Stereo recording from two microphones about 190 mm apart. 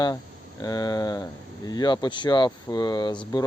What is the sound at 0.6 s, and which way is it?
Speech, 20° left (ahead or behind).